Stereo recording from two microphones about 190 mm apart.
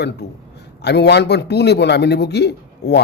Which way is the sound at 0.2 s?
60° left (ahead or behind).